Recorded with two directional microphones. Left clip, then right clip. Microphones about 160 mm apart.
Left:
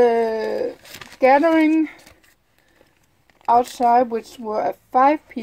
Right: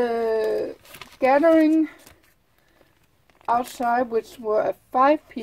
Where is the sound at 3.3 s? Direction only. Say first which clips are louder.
Left 6 dB; 5° left (ahead or behind).